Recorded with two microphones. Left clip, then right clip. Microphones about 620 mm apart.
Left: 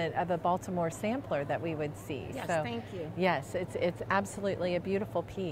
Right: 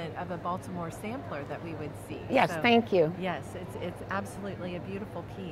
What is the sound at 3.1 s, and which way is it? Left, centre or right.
Speech, left.